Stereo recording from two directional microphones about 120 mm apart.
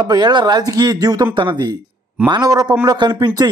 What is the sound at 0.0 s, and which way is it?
Speech, 35° right (ahead or behind).